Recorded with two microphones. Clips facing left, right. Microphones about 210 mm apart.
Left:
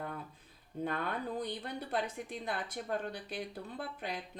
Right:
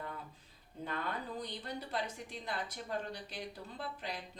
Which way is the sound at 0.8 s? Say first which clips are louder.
Left 4 dB; 55° left (ahead or behind).